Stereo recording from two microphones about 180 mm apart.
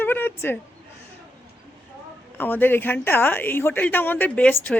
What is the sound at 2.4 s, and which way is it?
A woman's voice, 10° left (ahead or behind).